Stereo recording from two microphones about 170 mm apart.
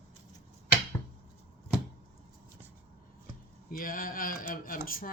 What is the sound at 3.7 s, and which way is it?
Speech, 55° left (ahead or behind).